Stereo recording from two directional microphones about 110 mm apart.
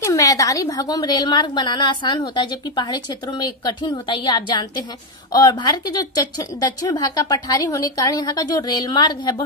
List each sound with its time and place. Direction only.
0.0 s a woman's voice: 30° left (ahead or behind)